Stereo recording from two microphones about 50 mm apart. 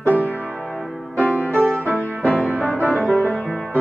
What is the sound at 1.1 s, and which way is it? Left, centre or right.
Music, left.